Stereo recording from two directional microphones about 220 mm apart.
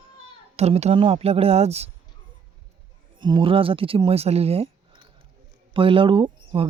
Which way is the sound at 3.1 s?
20° right (ahead or behind).